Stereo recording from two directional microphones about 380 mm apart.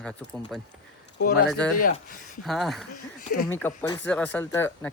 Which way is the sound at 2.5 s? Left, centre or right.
Centre.